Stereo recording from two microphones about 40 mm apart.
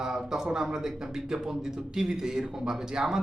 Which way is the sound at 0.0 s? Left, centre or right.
Centre.